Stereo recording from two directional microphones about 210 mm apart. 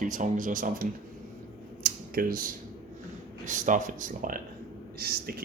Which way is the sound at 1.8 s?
40° right (ahead or behind).